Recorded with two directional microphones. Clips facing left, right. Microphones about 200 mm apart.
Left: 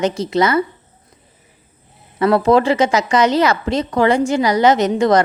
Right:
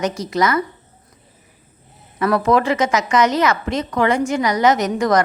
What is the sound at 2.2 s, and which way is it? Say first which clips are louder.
A woman's voice: left 3 dB; 25° left (ahead or behind).